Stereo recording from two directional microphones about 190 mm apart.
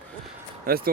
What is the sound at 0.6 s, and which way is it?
Speech, 50° right (ahead or behind).